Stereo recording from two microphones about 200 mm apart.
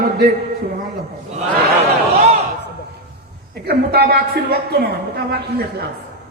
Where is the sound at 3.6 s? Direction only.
50° right (ahead or behind).